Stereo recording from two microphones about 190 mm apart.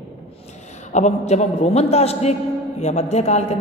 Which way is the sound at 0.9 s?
35° left (ahead or behind).